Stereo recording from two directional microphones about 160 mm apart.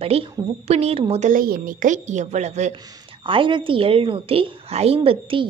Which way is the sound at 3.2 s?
30° right (ahead or behind).